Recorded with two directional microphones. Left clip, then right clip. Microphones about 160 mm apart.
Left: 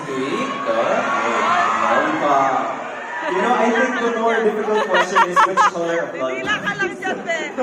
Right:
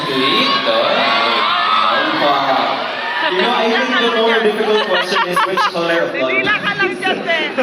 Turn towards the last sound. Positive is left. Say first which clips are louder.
# right 6 dB
turn(degrees=35)  # may be behind; listen again after turning